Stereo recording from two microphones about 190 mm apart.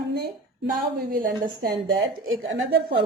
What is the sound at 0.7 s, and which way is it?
Speech, 45° right (ahead or behind).